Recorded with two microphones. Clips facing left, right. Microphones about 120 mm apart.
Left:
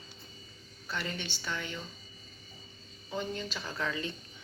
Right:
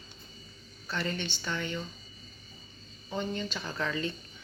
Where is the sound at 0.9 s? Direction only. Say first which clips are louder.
Right 4 dB; 10° left (ahead or behind).